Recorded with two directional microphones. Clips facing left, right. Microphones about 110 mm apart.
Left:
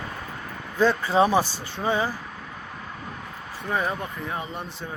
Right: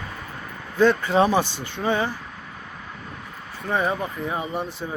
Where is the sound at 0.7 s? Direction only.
5° left (ahead or behind).